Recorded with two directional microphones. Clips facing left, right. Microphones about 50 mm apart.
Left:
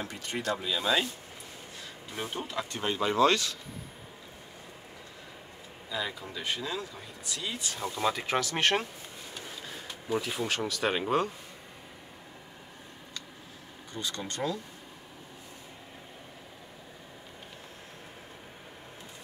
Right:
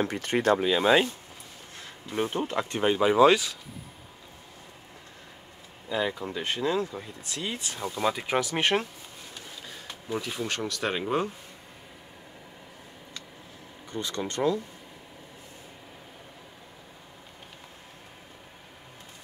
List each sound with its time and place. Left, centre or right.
0.0 s speech: right; by 3.5 s centre
5.9 s speech: right
7.8 s speech: centre
9.3 s a sound: centre
10.1 s speech: centre
13.9 s speech: right